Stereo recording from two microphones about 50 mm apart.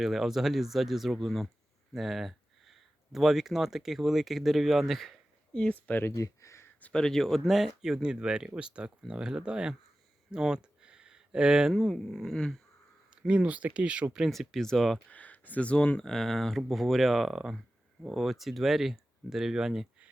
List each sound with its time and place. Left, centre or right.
0.0 s speech: centre
6.0 s speech: left
6.9 s speech: centre
10.3 s a sound: centre
11.7 s speech: centre
13.2 s speech: right
14.3 s speech: centre
15.1 s speech: left
16.0 s speech: centre